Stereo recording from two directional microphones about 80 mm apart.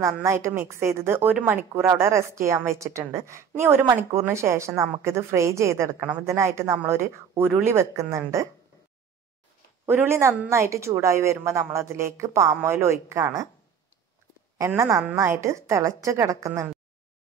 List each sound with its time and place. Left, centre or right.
0.0 s a woman's voice: right
2.0 s a woman's voice: right
9.8 s a woman's voice: right
14.8 s a woman's voice: right